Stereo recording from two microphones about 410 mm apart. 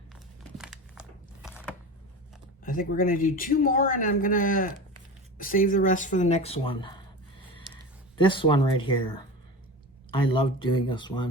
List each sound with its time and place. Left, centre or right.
0.6 s crumpling: centre
2.6 s speech: centre
7.5 s a sound: centre
10.1 s speech: centre